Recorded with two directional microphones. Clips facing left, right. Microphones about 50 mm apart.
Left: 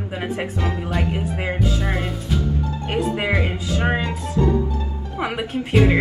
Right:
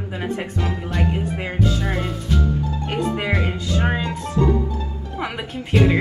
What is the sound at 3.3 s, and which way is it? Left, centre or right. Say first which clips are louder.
Speech: left 1 dB; centre.